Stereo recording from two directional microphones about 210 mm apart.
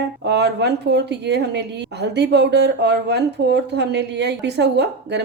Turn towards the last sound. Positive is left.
turn(degrees=-55)  # may be behind; listen again after turning